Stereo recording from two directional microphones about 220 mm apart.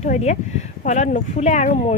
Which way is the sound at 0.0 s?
30° left (ahead or behind).